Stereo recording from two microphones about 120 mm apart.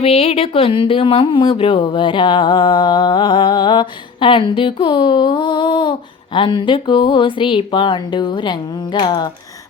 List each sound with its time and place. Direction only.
0.0 s speech: 55° left (ahead or behind); by 9.3 s 35° left (ahead or behind)